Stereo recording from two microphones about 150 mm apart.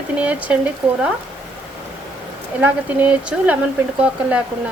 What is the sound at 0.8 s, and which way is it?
Dishes, 5° right (ahead or behind).